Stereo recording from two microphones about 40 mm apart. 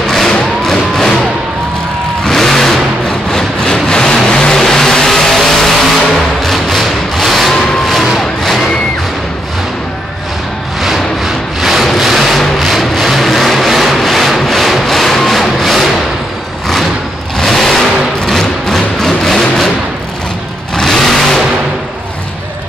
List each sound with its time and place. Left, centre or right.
0.7 s music: centre
2.2 s vehicle: centre
4.6 s vehicle: centre
6.4 s a sound: centre
10.8 s a sound: centre
12.8 s rub: centre
17.4 s vehicle: centre
20.7 s vehicle: centre